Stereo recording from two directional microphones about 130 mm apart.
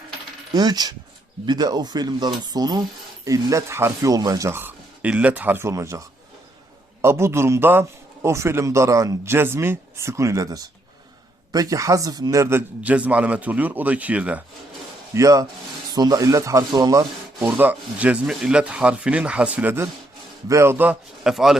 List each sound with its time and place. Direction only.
0.5 s a man's voice: 30° right (ahead or behind); by 14.4 s 10° right (ahead or behind)
15.1 s a man's voice: 25° right (ahead or behind)
17.4 s a man's voice: 15° right (ahead or behind)
21.2 s speech: centre (ahead or behind)